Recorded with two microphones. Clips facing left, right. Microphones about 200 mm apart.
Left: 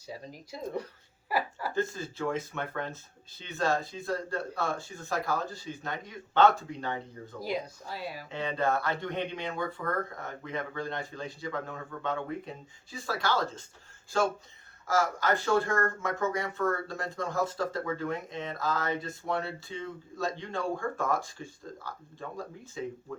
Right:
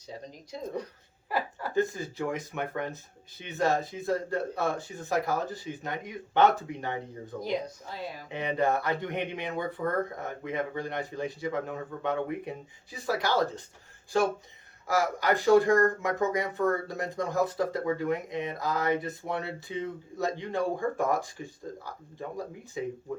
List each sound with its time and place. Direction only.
0.5 s speech: 5° left (ahead or behind)
1.7 s speech: 15° right (ahead or behind)
8.3 s speech: 15° right (ahead or behind)